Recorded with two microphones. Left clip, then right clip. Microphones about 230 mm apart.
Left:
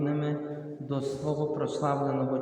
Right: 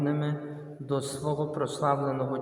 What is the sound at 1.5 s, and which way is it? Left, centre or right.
Speech, right.